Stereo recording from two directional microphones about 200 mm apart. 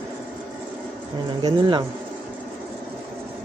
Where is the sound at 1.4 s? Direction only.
25° right (ahead or behind).